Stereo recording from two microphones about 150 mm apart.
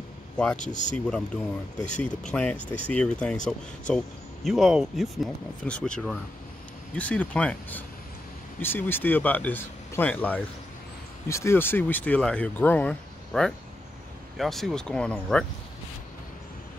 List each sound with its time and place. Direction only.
0.6 s speech: 55° left (ahead or behind)
0.9 s speech: 5° left (ahead or behind)